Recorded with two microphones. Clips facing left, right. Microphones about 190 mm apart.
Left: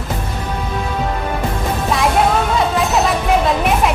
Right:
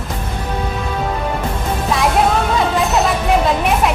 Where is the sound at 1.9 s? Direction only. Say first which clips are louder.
Even; centre (ahead or behind).